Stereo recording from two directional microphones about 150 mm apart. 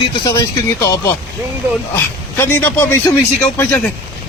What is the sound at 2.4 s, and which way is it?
Speech, 15° left (ahead or behind).